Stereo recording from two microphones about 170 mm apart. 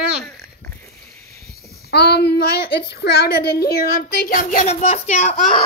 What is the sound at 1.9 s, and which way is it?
Speech, 75° left (ahead or behind).